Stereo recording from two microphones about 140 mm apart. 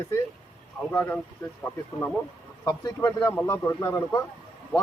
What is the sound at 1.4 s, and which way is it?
Speech, 20° left (ahead or behind).